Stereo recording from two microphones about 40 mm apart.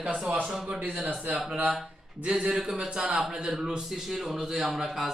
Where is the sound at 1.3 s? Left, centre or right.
Centre.